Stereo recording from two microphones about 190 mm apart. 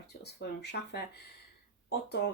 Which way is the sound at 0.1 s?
60° left (ahead or behind).